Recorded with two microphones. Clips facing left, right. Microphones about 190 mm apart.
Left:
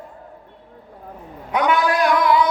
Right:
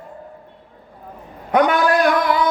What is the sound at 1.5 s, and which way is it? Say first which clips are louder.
Speech: right 3 dB; 45° right (ahead or behind).